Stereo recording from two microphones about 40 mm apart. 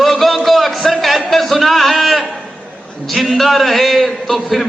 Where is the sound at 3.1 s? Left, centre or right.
Centre.